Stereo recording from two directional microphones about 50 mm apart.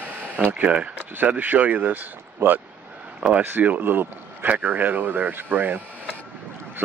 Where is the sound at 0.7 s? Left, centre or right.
Right.